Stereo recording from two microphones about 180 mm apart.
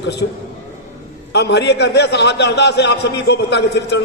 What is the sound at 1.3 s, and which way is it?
A man's voice, 70° left (ahead or behind).